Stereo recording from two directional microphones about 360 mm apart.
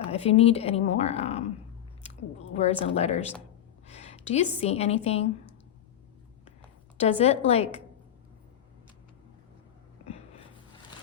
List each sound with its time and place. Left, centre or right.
0.1 s a woman's voice: centre
2.5 s a woman's voice: centre
6.9 s a woman's voice: centre